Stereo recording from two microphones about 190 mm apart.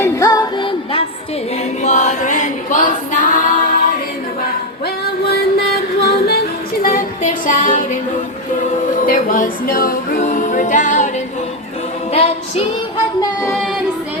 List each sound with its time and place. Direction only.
0.0 s music: 20° left (ahead or behind)
1.8 s a capella: 40° left (ahead or behind)
6.1 s singing: 55° left (ahead or behind)
6.8 s music: 45° left (ahead or behind)
9.0 s a capella: 45° left (ahead or behind)
12.1 s music: 35° left (ahead or behind)